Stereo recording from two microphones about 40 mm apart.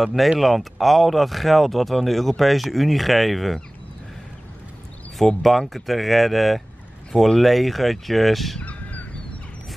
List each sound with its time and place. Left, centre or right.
0.0 s speech: centre
5.4 s speech: centre
8.6 s crow: left